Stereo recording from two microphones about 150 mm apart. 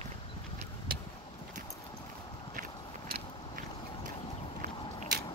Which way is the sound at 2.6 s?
85° right.